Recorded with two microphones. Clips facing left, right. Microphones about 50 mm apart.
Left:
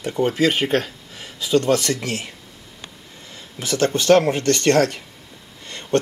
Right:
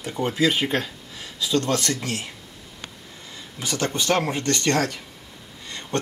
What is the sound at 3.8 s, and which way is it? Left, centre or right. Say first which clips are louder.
Speech: left 8 dB; left.